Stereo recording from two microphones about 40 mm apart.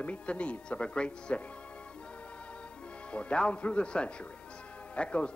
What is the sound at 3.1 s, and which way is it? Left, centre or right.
A man's voice, left.